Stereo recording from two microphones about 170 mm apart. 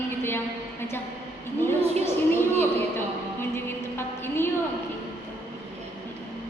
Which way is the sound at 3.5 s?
15° left (ahead or behind).